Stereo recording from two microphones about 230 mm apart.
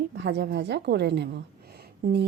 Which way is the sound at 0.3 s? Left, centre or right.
Right.